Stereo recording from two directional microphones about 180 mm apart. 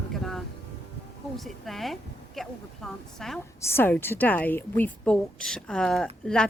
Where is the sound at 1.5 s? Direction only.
Centre (ahead or behind).